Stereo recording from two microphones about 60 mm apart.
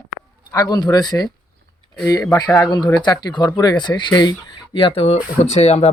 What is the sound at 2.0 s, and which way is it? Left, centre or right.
Speech, left.